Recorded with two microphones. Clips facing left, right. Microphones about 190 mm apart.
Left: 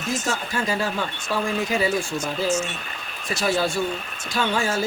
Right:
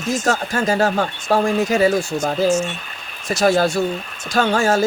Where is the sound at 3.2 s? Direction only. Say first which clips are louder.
Right 7 dB; 45° right (ahead or behind).